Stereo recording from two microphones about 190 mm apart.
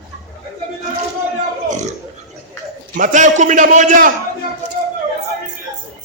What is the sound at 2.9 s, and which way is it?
A man's voice, 40° right (ahead or behind).